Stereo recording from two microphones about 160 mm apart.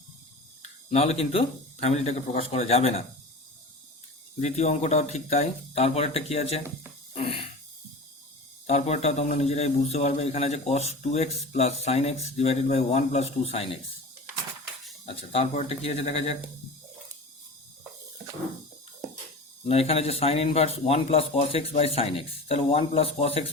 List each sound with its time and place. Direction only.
0.6 s speech: 40° left (ahead or behind)
4.4 s a man's voice: 45° left (ahead or behind)
7.1 s a sound: 35° left (ahead or behind)
8.6 s a man's voice: 45° left (ahead or behind)
15.0 s speech: 40° left (ahead or behind)
19.6 s speech: 40° left (ahead or behind)